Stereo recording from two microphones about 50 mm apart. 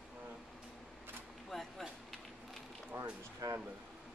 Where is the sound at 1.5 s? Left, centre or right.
Centre.